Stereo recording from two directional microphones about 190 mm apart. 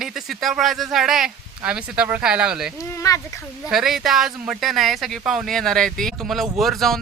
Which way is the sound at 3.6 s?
Centre (ahead or behind).